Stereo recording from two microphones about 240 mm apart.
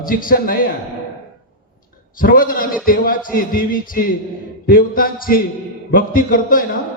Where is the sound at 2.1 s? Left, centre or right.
Left.